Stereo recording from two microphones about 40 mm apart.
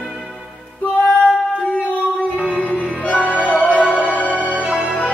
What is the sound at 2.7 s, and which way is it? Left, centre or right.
Music, left.